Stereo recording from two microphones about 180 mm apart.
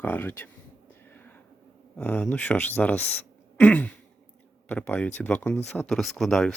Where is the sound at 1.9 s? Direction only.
10° left (ahead or behind).